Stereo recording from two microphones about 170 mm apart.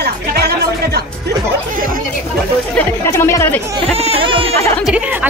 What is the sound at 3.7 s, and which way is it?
Speech, 35° right (ahead or behind).